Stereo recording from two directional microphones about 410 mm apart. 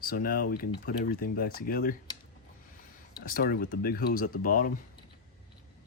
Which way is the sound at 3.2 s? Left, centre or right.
Left.